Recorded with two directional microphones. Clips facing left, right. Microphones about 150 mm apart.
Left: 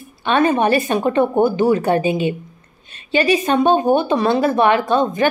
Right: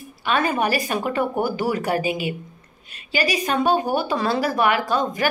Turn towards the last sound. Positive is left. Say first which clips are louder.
# left 6 dB
turn(degrees=25)  # may be behind; listen again after turning